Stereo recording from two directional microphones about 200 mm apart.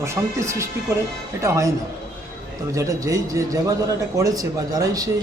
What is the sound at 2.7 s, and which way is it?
A man's voice, 15° right (ahead or behind).